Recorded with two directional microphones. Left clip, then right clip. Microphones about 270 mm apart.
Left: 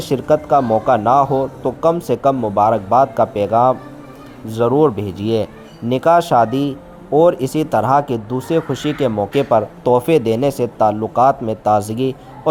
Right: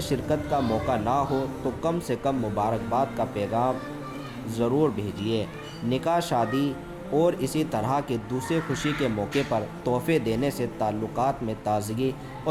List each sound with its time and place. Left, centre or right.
0.0 s speech: centre